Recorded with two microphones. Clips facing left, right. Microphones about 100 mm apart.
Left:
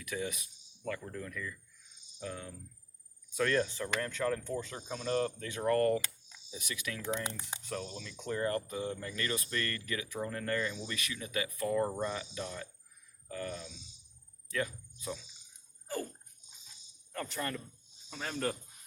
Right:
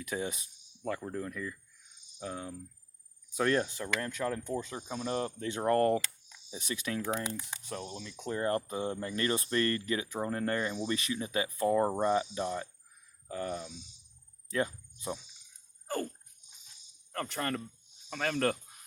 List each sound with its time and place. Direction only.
0.1 s speech: 30° right (ahead or behind)
7.7 s speech: 15° right (ahead or behind)
17.1 s cricket: 60° right (ahead or behind)
18.1 s speech: 75° right (ahead or behind)